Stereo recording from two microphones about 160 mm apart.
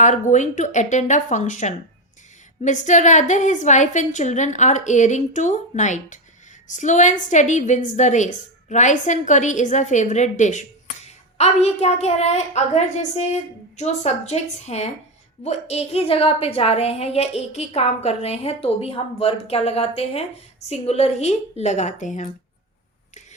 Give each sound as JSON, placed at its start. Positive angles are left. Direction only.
{"t": 0.0, "sound": "a woman's voice", "side_deg": 50}